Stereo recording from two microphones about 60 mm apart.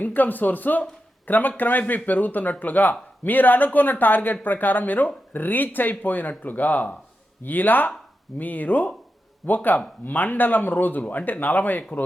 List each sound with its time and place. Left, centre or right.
0.0 s speech: left